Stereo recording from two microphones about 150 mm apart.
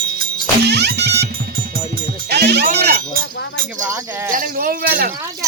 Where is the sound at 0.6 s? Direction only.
90° right; by 3.1 s 65° right (ahead or behind).